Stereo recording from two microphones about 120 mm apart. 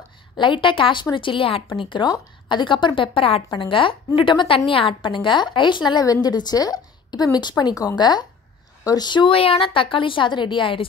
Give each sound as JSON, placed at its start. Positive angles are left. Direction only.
{"t": 0.4, "sound": "a woman's voice", "side_deg": 40}